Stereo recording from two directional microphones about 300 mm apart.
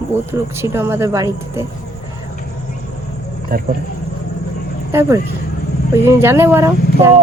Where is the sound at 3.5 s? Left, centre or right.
Right.